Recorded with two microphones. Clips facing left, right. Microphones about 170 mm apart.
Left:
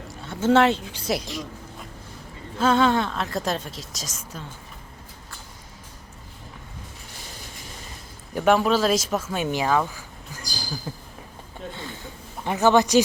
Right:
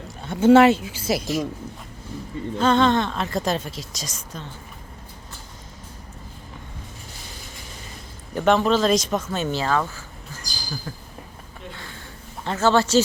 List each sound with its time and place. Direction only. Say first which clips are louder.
0.3 s a woman's voice: right 5 dB; 15° right (ahead or behind)
2.6 s a woman's voice: right 1 dB; 5° left (ahead or behind)
8.4 s speech: right 1 dB; 5° left (ahead or behind)
10.9 s a sound: left 1 dB; 20° left (ahead or behind)
12.5 s speech: left 1 dB; 15° left (ahead or behind)